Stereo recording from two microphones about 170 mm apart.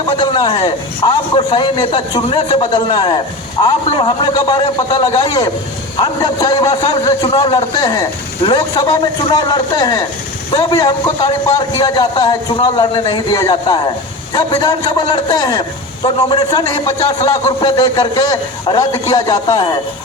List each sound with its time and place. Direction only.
0.1 s a man's voice: 30° left (ahead or behind)